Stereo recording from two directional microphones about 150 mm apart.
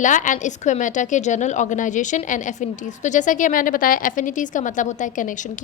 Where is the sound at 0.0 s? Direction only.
60° left (ahead or behind).